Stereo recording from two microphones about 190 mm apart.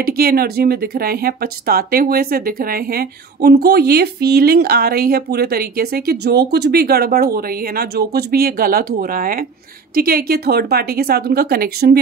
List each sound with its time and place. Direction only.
0.0 s speech: 50° right (ahead or behind)